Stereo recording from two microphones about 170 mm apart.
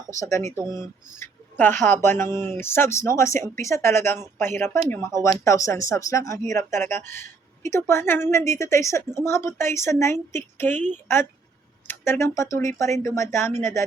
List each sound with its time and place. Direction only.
0.1 s speech: 20° left (ahead or behind)
0.5 s speech: 25° right (ahead or behind)
1.2 s speech: 15° left (ahead or behind)
11.9 s speech: 15° left (ahead or behind)